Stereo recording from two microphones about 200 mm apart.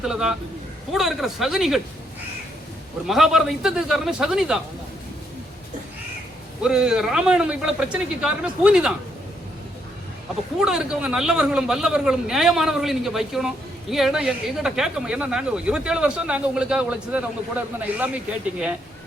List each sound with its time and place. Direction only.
0.0 s speech: centre (ahead or behind)
3.1 s speech: centre (ahead or behind)
6.6 s speech: 5° right (ahead or behind)
10.6 s speech: 5° right (ahead or behind)